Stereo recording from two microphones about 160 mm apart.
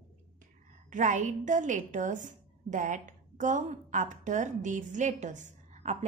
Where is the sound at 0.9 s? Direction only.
50° right (ahead or behind).